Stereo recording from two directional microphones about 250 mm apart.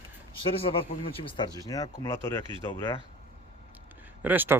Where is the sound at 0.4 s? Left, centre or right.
Left.